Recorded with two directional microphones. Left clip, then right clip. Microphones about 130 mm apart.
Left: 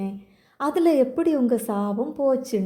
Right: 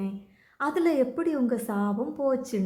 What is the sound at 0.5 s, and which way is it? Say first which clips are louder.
A woman's voice: left 5 dB; 25° left (ahead or behind).